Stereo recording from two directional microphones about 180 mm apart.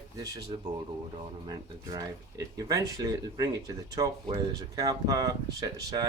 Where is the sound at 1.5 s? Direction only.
20° right (ahead or behind).